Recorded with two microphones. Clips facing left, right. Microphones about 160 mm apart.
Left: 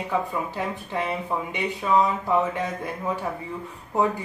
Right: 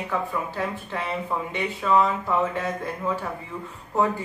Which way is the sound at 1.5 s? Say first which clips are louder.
Right 1 dB; 15° left (ahead or behind).